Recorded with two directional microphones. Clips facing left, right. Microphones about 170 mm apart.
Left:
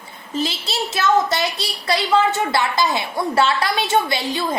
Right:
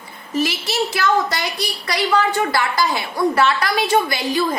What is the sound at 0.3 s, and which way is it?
A woman's voice, 25° left (ahead or behind).